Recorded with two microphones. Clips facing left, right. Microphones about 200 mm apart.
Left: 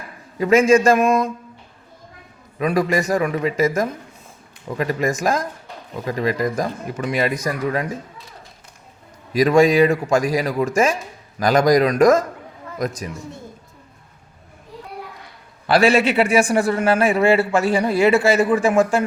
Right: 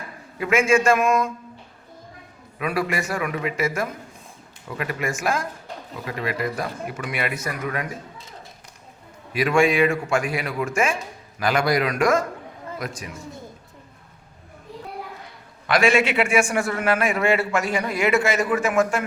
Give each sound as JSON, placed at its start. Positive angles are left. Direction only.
{"t": 0.3, "sound": "speech", "side_deg": 40}
{"t": 2.6, "sound": "speech", "side_deg": 35}
{"t": 9.3, "sound": "speech", "side_deg": 40}
{"t": 15.6, "sound": "speech", "side_deg": 35}